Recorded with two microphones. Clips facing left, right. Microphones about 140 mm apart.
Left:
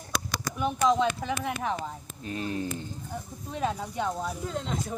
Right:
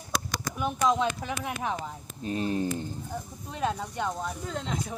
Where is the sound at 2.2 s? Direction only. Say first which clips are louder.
Right 4 dB; 30° right (ahead or behind).